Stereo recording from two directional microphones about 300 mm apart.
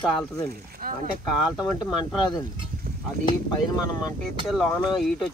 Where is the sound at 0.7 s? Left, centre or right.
Right.